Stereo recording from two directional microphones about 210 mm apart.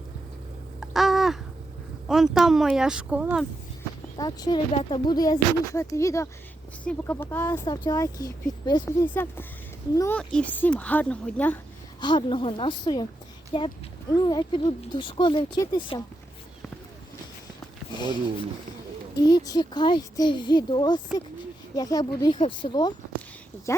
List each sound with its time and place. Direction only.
0.8 s a sound: centre (ahead or behind)
2.0 s speech: centre (ahead or behind)
4.2 s speech: 20° left (ahead or behind)
7.6 s speech: 20° left (ahead or behind)
11.9 s speech: 20° left (ahead or behind)
19.1 s speech: 15° left (ahead or behind)
23.7 s a sound: 15° left (ahead or behind)